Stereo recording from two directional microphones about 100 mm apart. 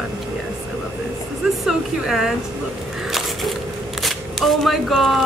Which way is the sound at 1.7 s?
5° right (ahead or behind).